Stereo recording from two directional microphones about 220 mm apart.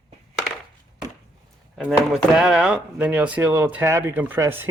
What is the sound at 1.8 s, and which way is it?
Speech, centre (ahead or behind).